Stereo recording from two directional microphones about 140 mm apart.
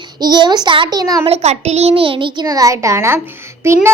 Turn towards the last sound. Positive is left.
turn(degrees=-20)  # may be behind; listen again after turning